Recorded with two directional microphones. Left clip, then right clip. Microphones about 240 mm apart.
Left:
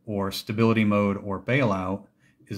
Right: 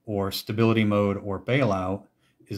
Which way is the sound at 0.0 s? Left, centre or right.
Centre.